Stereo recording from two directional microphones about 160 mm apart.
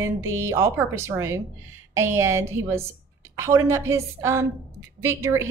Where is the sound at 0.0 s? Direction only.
15° right (ahead or behind).